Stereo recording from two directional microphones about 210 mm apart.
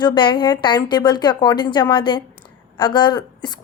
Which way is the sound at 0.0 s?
20° left (ahead or behind).